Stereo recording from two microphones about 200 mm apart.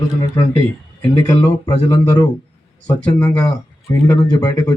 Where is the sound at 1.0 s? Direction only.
15° left (ahead or behind).